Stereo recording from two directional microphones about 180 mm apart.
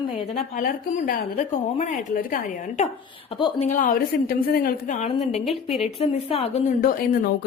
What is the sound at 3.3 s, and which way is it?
Speech, 30° left (ahead or behind).